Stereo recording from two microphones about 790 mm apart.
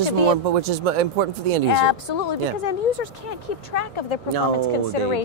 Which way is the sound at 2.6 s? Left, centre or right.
Left.